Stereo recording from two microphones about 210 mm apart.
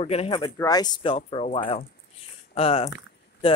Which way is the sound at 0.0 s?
30° left (ahead or behind).